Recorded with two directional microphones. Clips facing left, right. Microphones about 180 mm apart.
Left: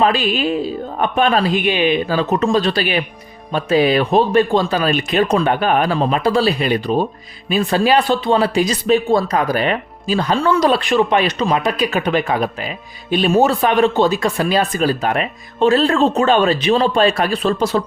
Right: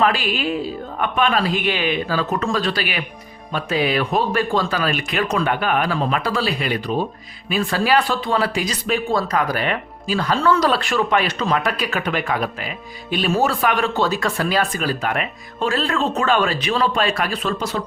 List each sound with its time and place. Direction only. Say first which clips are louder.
0.0 s speech: left 3 dB; 20° left (ahead or behind)
1.5 s speech: left 5 dB; 20° left (ahead or behind)